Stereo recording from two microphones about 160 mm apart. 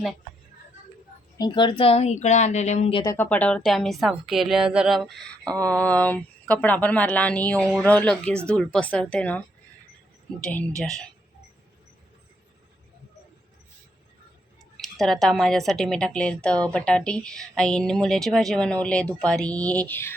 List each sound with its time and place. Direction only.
1.4 s a woman's voice: 30° left (ahead or behind); by 2.9 s 45° left (ahead or behind)
2.9 s speech: 20° left (ahead or behind)
3.2 s a woman's voice: 10° left (ahead or behind)
10.4 s a woman's voice: 5° left (ahead or behind)
14.8 s a woman's voice: centre (ahead or behind)